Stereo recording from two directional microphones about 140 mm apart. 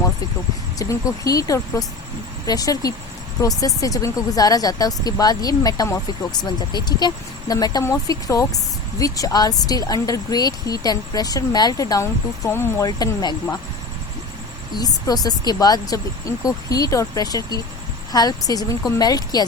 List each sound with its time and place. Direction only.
0.8 s speech: 25° left (ahead or behind)
14.8 s speech: 25° left (ahead or behind)